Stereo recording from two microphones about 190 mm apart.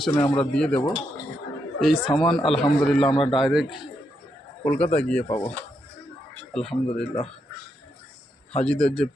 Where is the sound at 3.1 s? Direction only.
25° left (ahead or behind).